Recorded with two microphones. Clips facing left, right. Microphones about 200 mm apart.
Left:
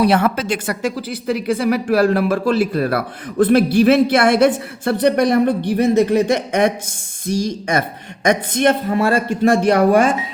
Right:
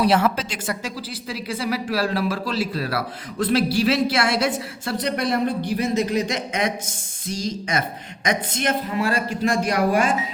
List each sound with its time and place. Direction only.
0.0 s a woman's voice: 55° left (ahead or behind)
7.8 s speech: 55° left (ahead or behind)